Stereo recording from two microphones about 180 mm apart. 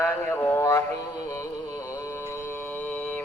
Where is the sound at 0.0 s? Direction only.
10° left (ahead or behind).